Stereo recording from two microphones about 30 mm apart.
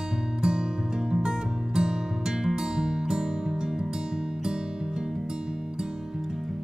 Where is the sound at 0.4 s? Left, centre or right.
Right.